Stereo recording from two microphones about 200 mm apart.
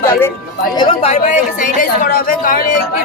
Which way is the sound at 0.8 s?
30° left (ahead or behind).